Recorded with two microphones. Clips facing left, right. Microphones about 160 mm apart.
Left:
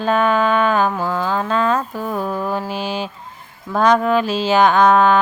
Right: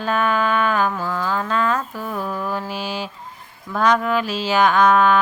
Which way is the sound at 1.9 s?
40° left (ahead or behind).